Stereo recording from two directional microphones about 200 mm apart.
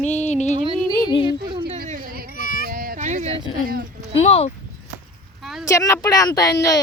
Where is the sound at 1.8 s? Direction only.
45° right (ahead or behind).